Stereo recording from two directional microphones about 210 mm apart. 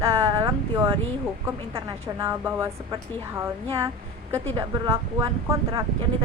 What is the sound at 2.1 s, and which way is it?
Speech, 15° right (ahead or behind).